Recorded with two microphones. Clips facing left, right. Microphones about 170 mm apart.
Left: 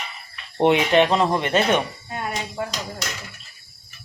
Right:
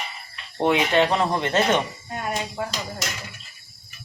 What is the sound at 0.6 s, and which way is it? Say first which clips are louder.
Speech: left 3 dB; 20° left (ahead or behind).